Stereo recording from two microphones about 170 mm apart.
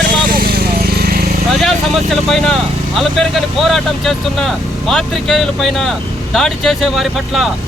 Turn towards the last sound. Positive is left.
turn(degrees=0)  # may be behind; listen again after turning